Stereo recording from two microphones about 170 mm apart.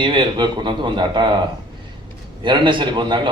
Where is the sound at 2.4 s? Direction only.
30° right (ahead or behind).